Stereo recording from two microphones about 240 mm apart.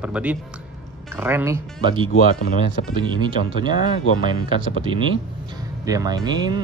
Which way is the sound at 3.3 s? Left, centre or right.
Right.